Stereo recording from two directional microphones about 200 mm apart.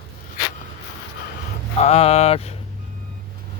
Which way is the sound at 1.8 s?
30° left (ahead or behind).